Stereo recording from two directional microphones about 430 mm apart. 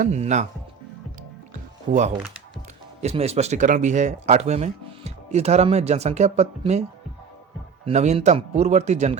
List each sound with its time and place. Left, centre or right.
0.0 s speech: centre
1.9 s speech: centre
7.9 s speech: centre